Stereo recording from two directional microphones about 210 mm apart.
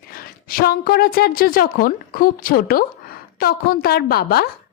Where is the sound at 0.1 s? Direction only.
45° left (ahead or behind).